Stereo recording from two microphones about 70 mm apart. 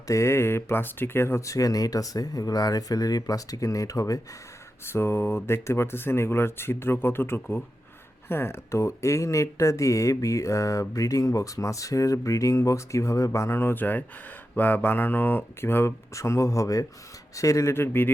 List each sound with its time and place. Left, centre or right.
0.1 s speech: left
4.9 s speech: left
16.1 s speech: left
17.7 s speech: left